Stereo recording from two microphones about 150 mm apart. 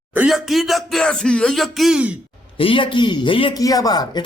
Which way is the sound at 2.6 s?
35° left (ahead or behind).